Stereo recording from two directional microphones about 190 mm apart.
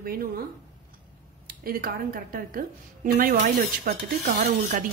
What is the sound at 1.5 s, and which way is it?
Speech, 50° right (ahead or behind).